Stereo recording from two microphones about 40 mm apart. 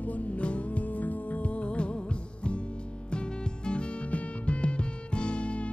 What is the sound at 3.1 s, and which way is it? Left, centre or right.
Music, left.